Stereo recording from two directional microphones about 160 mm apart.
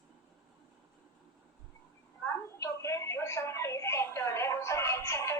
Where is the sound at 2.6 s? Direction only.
20° left (ahead or behind).